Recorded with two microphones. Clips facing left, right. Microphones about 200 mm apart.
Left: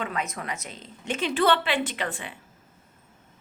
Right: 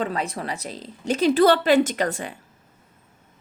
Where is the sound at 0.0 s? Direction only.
35° right (ahead or behind).